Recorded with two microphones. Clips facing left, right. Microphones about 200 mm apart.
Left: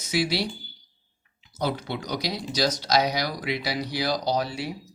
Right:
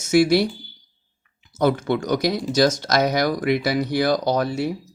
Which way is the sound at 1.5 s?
45° right (ahead or behind).